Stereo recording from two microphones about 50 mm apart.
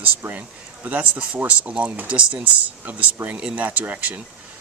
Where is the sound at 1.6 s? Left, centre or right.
Right.